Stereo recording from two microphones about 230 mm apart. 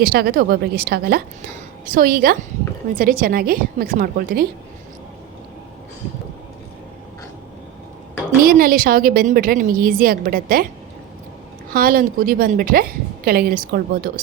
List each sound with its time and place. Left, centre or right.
0.0 s a woman's voice: right
8.4 s a woman's voice: right
11.7 s a woman's voice: right